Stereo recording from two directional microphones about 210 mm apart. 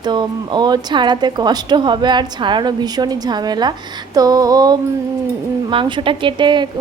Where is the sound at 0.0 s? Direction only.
20° right (ahead or behind).